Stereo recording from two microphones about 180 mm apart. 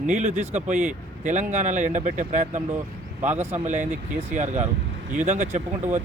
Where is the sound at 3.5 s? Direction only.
40° right (ahead or behind).